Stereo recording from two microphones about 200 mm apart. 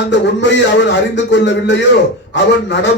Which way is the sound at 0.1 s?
60° left (ahead or behind).